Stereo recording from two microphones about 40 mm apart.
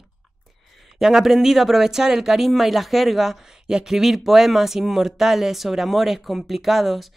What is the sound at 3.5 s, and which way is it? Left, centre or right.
Speech, centre.